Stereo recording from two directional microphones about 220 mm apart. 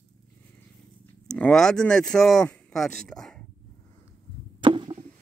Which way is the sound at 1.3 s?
5° left (ahead or behind).